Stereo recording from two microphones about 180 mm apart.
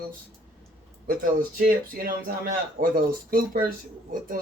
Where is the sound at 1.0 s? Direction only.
55° right (ahead or behind).